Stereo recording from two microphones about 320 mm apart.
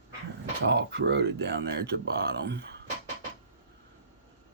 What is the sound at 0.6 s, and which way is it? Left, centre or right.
Speech, right.